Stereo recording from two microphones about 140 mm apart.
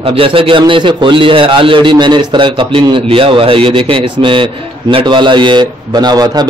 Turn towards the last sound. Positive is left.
turn(degrees=-30)  # may be behind; listen again after turning